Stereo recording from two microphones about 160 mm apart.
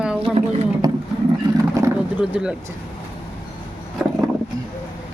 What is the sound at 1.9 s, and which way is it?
Speech, 10° right (ahead or behind).